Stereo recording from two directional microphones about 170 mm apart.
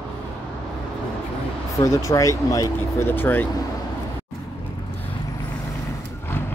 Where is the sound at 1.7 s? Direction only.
15° left (ahead or behind).